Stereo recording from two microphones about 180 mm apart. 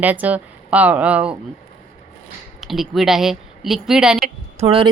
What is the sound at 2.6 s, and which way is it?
Speech, centre (ahead or behind).